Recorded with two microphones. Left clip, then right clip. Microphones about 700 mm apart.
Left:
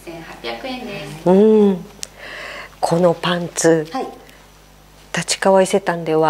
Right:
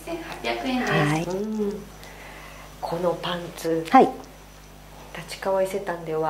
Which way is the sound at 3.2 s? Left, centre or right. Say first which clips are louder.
Left 11 dB; left.